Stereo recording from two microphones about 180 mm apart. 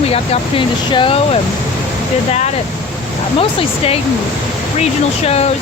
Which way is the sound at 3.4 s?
30° left (ahead or behind).